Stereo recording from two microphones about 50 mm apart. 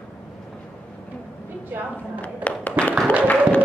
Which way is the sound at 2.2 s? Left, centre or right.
Left.